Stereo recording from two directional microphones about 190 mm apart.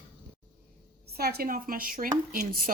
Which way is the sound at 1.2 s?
55° right (ahead or behind).